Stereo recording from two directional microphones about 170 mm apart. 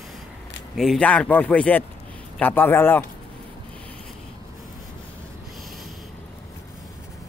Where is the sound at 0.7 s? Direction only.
5° left (ahead or behind).